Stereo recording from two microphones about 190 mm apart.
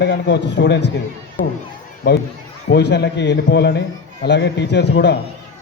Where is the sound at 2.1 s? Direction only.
60° left (ahead or behind).